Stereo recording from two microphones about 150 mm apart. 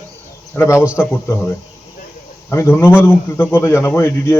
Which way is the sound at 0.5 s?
15° left (ahead or behind).